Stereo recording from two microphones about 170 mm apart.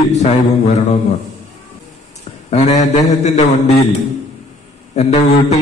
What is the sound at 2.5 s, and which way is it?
Speech, 40° left (ahead or behind).